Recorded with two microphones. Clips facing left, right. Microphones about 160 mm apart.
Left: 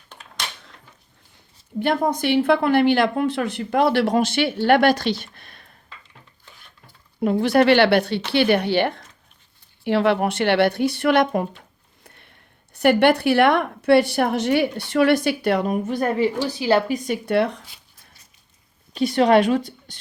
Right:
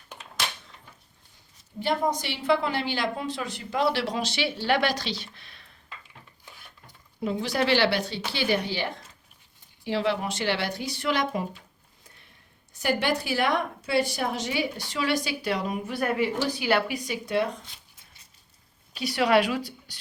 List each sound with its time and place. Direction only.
0.1 s a sound: 5° right (ahead or behind)
1.8 s a woman's voice: 55° left (ahead or behind)
7.2 s a woman's voice: 60° left (ahead or behind)
12.0 s a sound: 65° left (ahead or behind)
12.7 s a woman's voice: 65° left (ahead or behind); by 17.0 s 35° left (ahead or behind)
17.1 s a woman's voice: 60° left (ahead or behind)
18.9 s speech: 45° left (ahead or behind)